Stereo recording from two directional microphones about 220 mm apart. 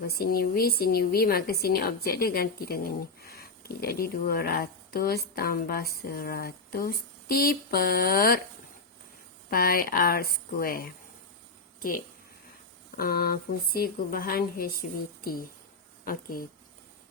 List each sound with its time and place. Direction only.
0.2 s speech: 45° left (ahead or behind)
9.5 s speech: 40° left (ahead or behind)
13.0 s speech: 45° left (ahead or behind)